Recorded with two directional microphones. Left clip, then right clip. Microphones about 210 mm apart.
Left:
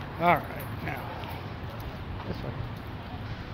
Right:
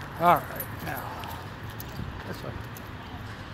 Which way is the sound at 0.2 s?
25° right (ahead or behind).